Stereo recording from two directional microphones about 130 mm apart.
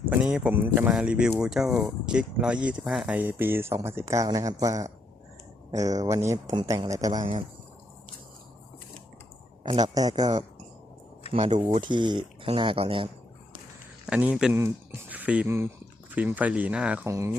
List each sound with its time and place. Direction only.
0.1 s a man's voice: 5° right (ahead or behind); by 7.3 s 30° right (ahead or behind)
9.7 s speech: 30° right (ahead or behind)
11.3 s speech: 50° right (ahead or behind)
11.9 s speech: 35° right (ahead or behind)
14.1 s speech: 10° right (ahead or behind)
15.1 s a sound: 10° right (ahead or behind)
16.1 s speech: 10° right (ahead or behind)
17.1 s a man's voice: 25° right (ahead or behind)